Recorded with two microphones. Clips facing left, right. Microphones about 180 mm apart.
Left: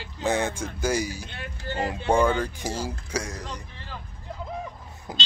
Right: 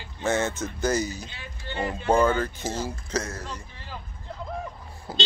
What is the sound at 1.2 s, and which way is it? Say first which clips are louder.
Speech: left 3 dB; 60° left (ahead or behind).